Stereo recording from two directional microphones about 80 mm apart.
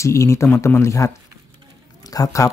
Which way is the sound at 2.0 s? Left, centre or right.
Left.